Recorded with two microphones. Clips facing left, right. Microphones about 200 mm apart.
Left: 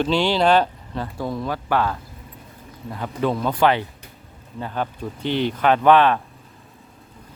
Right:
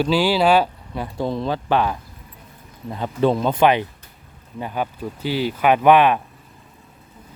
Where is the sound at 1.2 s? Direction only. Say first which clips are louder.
Right 4 dB; 25° right (ahead or behind).